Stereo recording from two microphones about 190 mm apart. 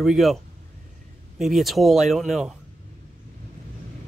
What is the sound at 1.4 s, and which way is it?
Speech, centre (ahead or behind).